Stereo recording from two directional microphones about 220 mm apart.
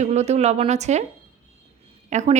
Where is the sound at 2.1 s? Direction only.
35° right (ahead or behind).